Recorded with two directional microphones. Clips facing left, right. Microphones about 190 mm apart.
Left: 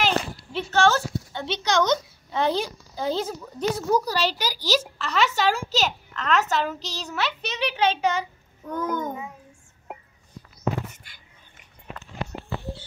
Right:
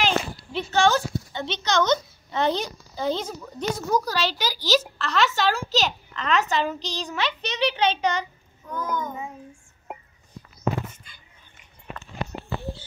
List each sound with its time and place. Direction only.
0.0 s a sound: 5° left (ahead or behind)
4.4 s a child's voice: 10° left (ahead or behind)
8.7 s child singing: 50° left (ahead or behind)